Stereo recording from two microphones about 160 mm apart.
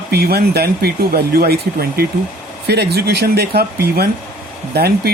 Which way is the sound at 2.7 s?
90° right.